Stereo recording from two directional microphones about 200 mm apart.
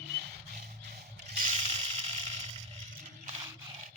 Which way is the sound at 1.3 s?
40° right (ahead or behind).